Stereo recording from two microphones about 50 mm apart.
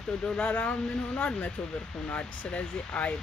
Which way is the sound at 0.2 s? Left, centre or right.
Centre.